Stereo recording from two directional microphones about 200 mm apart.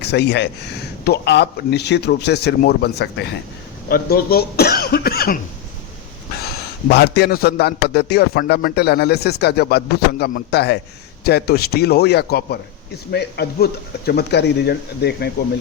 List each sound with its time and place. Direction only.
0.0 s speech: 55° left (ahead or behind)
6.4 s a man's voice: 55° left (ahead or behind)